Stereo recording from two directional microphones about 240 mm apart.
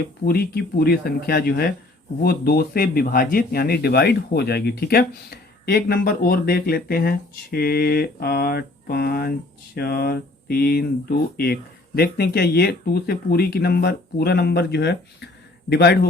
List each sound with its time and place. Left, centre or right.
0.3 s speech: left
11.9 s speech: left